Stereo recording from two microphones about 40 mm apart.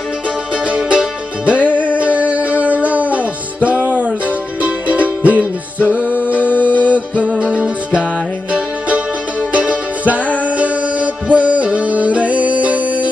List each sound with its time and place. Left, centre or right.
0.8 s music: right
7.5 s music: right
9.5 s music: right